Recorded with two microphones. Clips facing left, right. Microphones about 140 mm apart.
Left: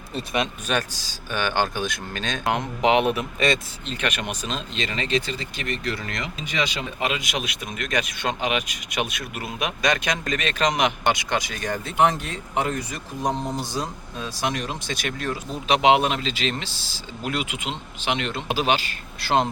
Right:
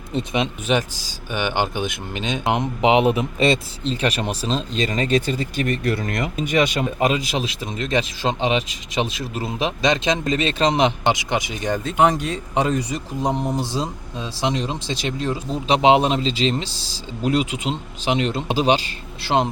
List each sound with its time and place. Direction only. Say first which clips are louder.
0.1 s speech: right 3 dB; 20° right (ahead or behind)